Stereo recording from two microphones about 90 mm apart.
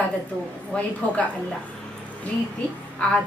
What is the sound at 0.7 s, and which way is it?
Speech, 15° left (ahead or behind).